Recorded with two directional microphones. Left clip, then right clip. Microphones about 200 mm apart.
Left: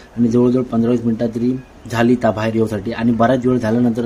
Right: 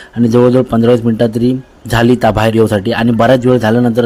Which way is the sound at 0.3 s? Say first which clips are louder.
Right 7 dB; 30° right (ahead or behind).